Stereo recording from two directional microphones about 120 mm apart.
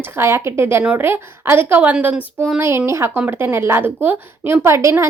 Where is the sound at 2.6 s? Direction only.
20° right (ahead or behind).